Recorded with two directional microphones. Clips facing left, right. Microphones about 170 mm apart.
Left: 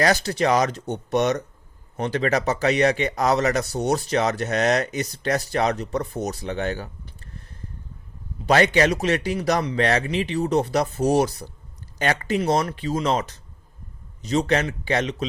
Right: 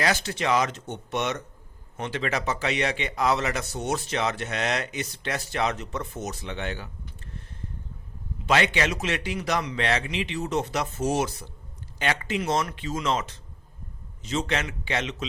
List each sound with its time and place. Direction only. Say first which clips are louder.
0.0 s speech: left 6 dB; 40° left (ahead or behind)
8.4 s speech: left 6 dB; 40° left (ahead or behind)